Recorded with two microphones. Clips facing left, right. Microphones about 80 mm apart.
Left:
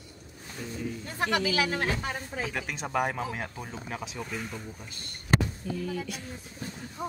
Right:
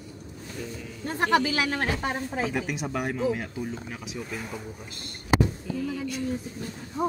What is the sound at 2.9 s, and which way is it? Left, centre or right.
Speech, centre.